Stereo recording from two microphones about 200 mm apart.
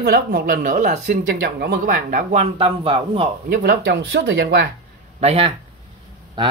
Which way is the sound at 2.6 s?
25° right (ahead or behind).